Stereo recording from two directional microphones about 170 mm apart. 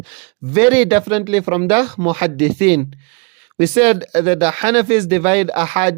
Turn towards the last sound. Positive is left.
turn(degrees=-35)  # may be behind; listen again after turning